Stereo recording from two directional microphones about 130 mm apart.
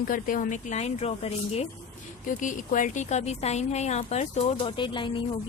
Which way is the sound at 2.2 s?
90° left.